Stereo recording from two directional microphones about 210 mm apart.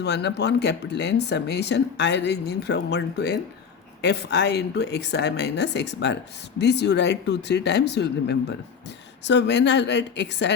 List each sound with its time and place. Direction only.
0.0 s speech: 55° left (ahead or behind)